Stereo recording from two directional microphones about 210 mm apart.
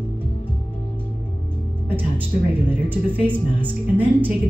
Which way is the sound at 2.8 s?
10° right (ahead or behind).